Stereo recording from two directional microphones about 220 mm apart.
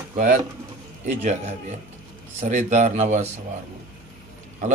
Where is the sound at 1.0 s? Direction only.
30° right (ahead or behind).